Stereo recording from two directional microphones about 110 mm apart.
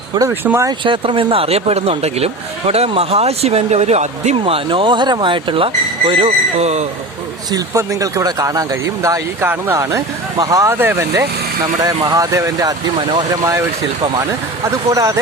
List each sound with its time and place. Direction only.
0.9 s speech: 50° right (ahead or behind); by 6.8 s 80° right
7.5 s speech: 30° right (ahead or behind)
13.0 s speech: 45° right (ahead or behind)
13.3 s speech: 30° right (ahead or behind)